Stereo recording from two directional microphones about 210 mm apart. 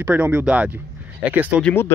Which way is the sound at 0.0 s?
5° right (ahead or behind).